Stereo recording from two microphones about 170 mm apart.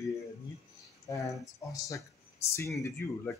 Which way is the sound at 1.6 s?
20° left (ahead or behind).